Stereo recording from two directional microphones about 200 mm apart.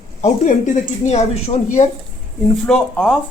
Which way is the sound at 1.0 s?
35° left (ahead or behind).